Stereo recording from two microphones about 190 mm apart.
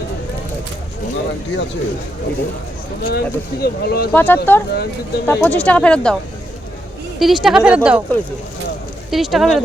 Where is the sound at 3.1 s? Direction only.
55° left (ahead or behind).